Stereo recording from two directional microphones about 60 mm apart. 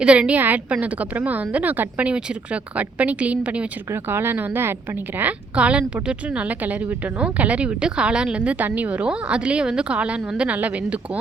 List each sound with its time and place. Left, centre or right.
0.0 s a woman's voice: centre
3.9 s speech: right
5.5 s a woman's voice: right